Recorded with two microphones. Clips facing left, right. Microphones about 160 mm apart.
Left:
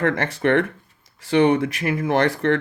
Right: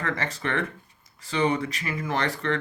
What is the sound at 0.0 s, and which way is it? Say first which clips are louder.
Speech: left 9 dB; 60° left (ahead or behind).